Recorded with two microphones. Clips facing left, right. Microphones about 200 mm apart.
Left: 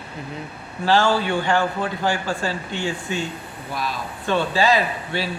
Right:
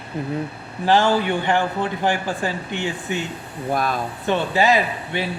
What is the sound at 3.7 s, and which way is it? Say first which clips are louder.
Speech: right 6 dB; 50° right (ahead or behind).